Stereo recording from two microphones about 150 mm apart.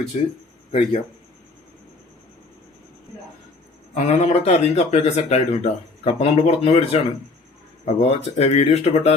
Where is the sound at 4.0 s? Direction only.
50° left (ahead or behind).